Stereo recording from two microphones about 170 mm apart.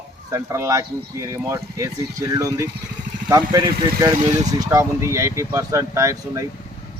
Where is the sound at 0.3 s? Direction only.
20° right (ahead or behind).